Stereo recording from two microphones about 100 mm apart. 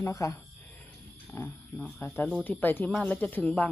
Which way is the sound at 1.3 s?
25° left (ahead or behind).